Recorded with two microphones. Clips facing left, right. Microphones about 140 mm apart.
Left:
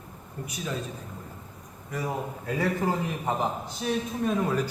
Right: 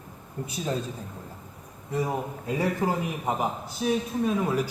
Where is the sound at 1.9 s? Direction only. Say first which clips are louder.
Right 3 dB; 20° right (ahead or behind).